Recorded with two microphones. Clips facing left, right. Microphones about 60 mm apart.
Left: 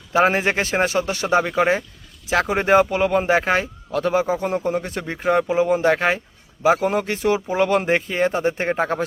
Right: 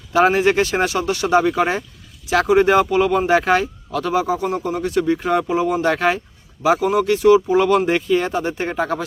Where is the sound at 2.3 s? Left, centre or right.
Left.